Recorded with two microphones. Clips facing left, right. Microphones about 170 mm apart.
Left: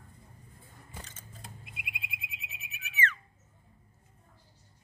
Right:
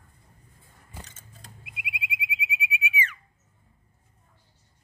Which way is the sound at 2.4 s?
10° right (ahead or behind).